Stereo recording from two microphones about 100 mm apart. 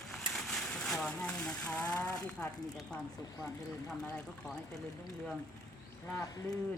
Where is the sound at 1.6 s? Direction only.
10° left (ahead or behind).